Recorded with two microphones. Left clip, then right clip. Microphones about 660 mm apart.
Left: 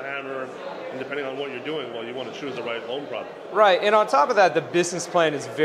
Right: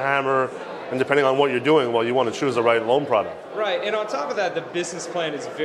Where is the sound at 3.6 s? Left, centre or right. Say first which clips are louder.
Left 7 dB; left.